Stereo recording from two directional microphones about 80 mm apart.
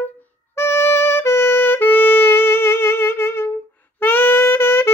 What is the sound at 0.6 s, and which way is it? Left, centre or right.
Music, left.